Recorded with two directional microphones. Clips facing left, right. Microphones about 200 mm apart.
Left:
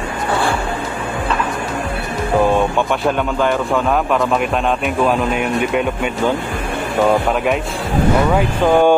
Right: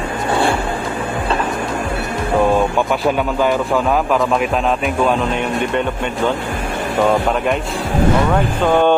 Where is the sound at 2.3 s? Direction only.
Centre (ahead or behind).